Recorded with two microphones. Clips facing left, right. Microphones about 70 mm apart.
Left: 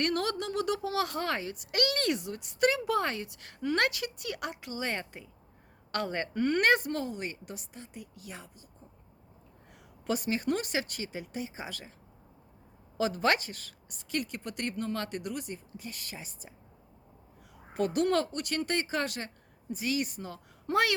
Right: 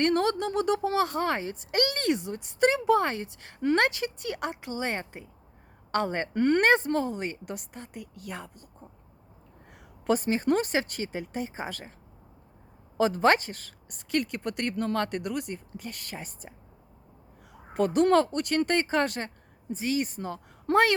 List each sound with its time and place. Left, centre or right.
0.0 s a woman's voice: right
6.3 s a woman's voice: right
6.6 s a woman's voice: right
10.1 s speech: right
13.0 s a woman's voice: right
17.7 s speech: right